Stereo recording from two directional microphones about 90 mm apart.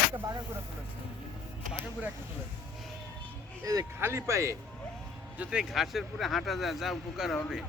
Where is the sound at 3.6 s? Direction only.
40° right (ahead or behind).